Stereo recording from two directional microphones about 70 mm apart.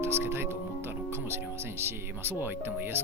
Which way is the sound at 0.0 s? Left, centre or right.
Right.